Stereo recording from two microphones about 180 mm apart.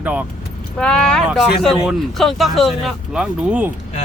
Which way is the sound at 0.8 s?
5° left (ahead or behind).